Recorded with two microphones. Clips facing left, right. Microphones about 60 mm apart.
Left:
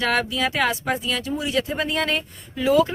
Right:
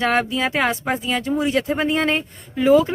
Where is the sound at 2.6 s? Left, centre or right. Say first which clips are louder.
Right 4 dB; right.